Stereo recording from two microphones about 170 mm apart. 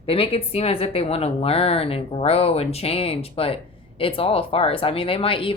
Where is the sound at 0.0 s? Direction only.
35° left (ahead or behind).